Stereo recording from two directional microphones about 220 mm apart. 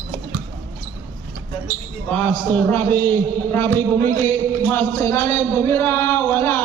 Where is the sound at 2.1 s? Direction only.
5° left (ahead or behind).